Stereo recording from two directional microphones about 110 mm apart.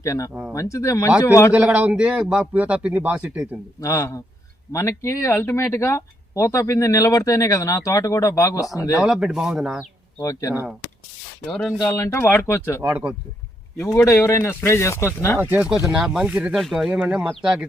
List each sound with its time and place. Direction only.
0.0 s speech: 30° left (ahead or behind)
1.5 s speech: 15° right (ahead or behind)
3.8 s speech: 30° left (ahead or behind)
9.0 s speech: 5° right (ahead or behind)
10.2 s speech: 30° left (ahead or behind)
11.4 s speech: 5° left (ahead or behind)
11.9 s speech: 25° left (ahead or behind)
12.9 s speech: 10° right (ahead or behind)
13.7 s speech: 30° left (ahead or behind)
15.4 s speech: 20° right (ahead or behind)
15.9 s speech: 5° right (ahead or behind)